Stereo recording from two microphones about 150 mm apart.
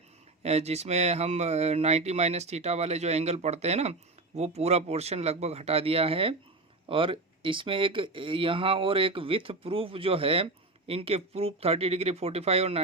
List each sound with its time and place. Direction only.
0.4 s speech: 45° right (ahead or behind)